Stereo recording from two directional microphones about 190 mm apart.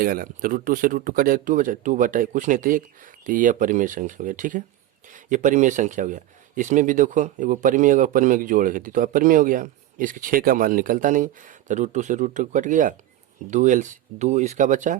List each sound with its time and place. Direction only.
0.0 s speech: 50° right (ahead or behind)